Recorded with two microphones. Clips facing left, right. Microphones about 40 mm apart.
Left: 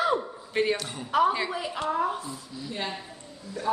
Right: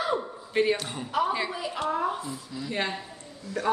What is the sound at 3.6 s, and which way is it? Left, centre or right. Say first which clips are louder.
Speech: right 2 dB; right.